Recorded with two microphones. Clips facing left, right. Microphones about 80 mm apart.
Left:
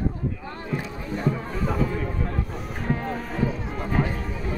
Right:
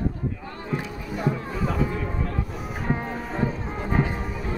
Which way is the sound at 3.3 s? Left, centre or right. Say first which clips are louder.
Right 1 dB; right.